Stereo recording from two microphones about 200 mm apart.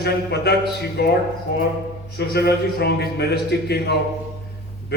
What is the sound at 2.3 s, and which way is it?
A man's voice, 55° left (ahead or behind).